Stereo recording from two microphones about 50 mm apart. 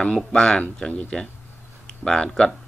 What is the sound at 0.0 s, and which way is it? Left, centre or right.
A man's voice, centre.